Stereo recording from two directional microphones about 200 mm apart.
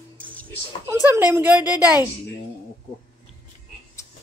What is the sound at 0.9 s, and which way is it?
A woman's voice, 10° right (ahead or behind).